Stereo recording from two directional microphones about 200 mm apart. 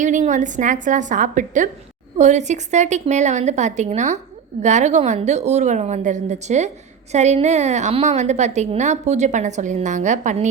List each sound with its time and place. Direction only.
0.0 s a woman's voice: 40° right (ahead or behind)